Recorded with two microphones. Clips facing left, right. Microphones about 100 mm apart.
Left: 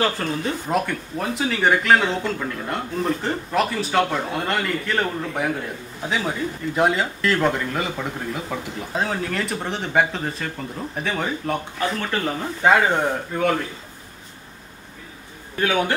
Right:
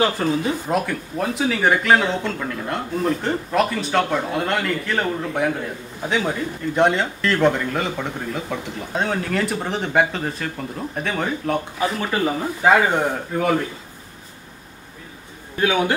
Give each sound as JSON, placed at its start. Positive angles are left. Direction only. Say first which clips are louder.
{"t": 0.2, "sound": "speech", "louder": "right 5 dB", "side_deg": -15}
{"t": 0.7, "sound": "speech", "louder": "right 1 dB", "side_deg": 0}